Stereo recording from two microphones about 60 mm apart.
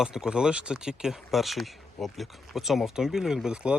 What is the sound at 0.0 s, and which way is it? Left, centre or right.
Speech, centre.